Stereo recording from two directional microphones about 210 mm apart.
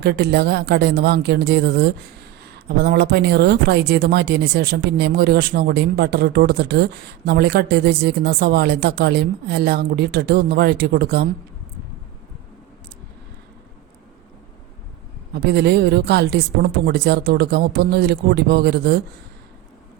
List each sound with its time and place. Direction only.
0.0 s speech: 50° right (ahead or behind)
15.4 s speech: 50° right (ahead or behind)